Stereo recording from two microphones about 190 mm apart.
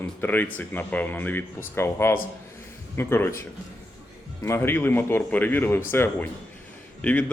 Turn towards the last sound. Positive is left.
turn(degrees=5)  # may be behind; listen again after turning